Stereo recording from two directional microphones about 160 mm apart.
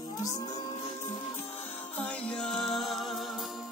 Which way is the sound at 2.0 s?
10° left (ahead or behind).